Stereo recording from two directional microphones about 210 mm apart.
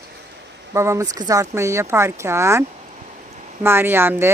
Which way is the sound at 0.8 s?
15° right (ahead or behind).